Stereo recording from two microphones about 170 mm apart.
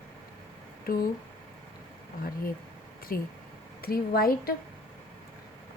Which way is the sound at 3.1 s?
60° left (ahead or behind).